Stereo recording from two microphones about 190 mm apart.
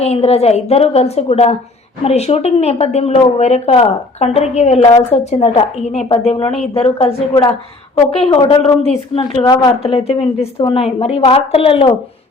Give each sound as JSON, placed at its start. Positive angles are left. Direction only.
{"t": 0.0, "sound": "a woman's voice", "side_deg": 30}
{"t": 9.8, "sound": "a woman's voice", "side_deg": 30}